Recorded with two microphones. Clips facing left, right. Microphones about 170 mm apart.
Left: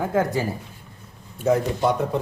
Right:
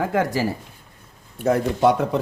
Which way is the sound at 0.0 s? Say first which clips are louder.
Right 1 dB; 85° right.